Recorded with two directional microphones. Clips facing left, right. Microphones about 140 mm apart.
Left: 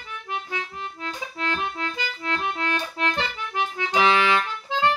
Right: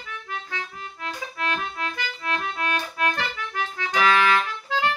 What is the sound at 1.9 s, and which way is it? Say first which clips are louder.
Accordion: even; 25° left (ahead or behind).